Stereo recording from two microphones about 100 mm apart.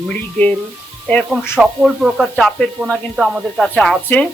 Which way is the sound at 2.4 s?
5° left (ahead or behind).